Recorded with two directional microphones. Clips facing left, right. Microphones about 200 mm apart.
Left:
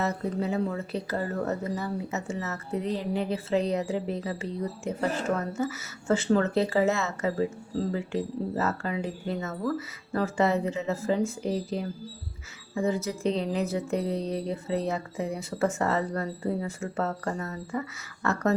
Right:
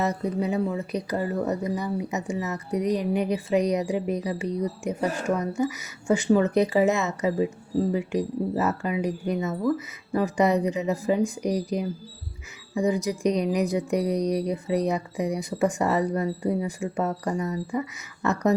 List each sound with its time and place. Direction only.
0.0 s speech: 15° right (ahead or behind)